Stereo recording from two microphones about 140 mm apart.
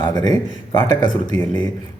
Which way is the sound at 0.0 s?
30° left (ahead or behind).